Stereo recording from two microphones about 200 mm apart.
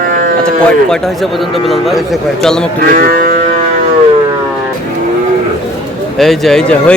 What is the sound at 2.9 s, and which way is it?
Livestock, 45° right (ahead or behind).